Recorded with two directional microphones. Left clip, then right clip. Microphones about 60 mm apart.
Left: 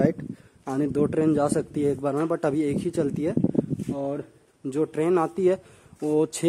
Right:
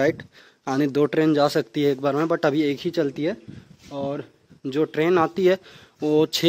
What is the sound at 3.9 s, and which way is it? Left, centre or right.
Speech, left.